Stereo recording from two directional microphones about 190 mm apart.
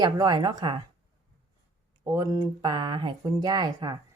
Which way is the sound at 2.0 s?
15° right (ahead or behind).